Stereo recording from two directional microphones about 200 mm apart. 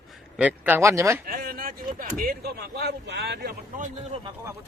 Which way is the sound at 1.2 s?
45° right (ahead or behind).